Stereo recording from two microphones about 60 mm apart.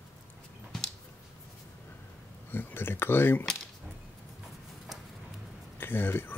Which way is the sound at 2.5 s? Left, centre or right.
Left.